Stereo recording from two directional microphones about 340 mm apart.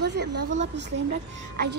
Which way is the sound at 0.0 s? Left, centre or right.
Right.